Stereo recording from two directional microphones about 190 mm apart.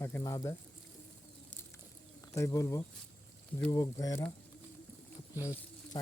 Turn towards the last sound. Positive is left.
turn(degrees=15)  # may be behind; listen again after turning